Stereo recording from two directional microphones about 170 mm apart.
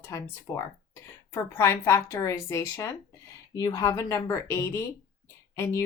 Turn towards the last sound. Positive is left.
turn(degrees=15)  # may be behind; listen again after turning